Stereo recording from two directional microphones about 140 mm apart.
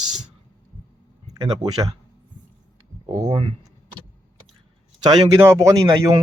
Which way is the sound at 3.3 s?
40° right (ahead or behind).